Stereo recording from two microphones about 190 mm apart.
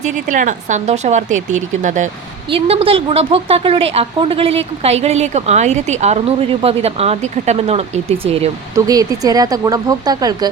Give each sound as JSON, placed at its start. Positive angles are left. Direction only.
{"t": 0.0, "sound": "a woman's voice", "side_deg": -40}
{"t": 2.5, "sound": "a woman's voice", "side_deg": -30}
{"t": 8.7, "sound": "speech", "side_deg": -20}